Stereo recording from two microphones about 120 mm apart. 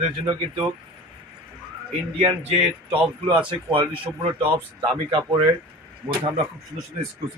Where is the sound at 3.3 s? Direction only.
45° right (ahead or behind).